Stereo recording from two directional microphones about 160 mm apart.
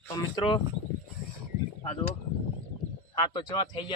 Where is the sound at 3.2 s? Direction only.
30° left (ahead or behind).